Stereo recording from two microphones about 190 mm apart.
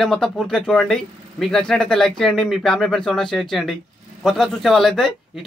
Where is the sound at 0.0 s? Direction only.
Centre (ahead or behind).